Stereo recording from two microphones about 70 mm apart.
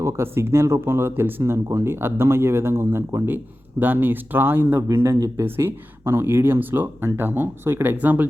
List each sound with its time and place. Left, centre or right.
0.0 s speech: right